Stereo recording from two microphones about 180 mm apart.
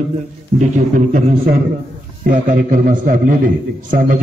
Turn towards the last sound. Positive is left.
turn(degrees=-50)  # may be behind; listen again after turning